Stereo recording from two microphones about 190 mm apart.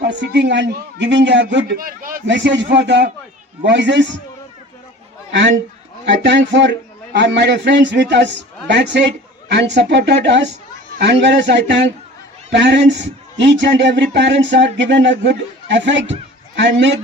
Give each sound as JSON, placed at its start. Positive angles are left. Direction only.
{"t": 0.0, "sound": "a man's voice", "side_deg": -65}
{"t": 2.2, "sound": "a man's voice", "side_deg": -70}
{"t": 6.2, "sound": "a man's voice", "side_deg": -70}